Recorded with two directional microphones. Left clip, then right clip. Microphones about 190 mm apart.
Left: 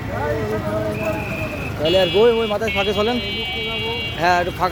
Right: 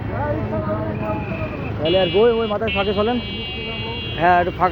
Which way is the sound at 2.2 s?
20° left (ahead or behind).